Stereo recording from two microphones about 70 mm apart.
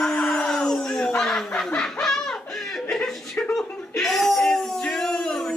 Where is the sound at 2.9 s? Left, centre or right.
Centre.